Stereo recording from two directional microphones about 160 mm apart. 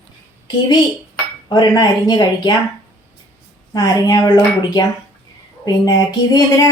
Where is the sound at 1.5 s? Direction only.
25° left (ahead or behind).